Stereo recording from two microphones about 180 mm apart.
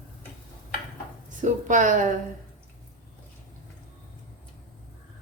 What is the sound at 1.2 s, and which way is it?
Speech, 45° right (ahead or behind).